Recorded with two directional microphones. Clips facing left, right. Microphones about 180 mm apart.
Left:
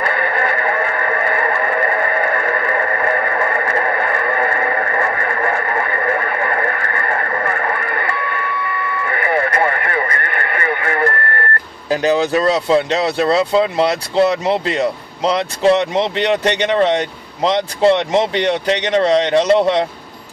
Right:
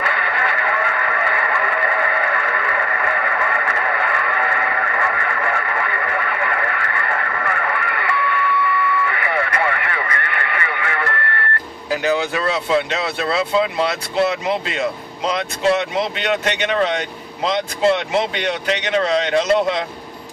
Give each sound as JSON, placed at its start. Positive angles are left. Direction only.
{"t": 0.0, "sound": "a sound", "side_deg": 40}
{"t": 11.9, "sound": "speech", "side_deg": 35}
{"t": 18.1, "sound": "speech", "side_deg": 30}